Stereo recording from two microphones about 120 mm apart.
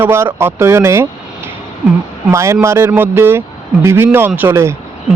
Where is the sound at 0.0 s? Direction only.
20° right (ahead or behind).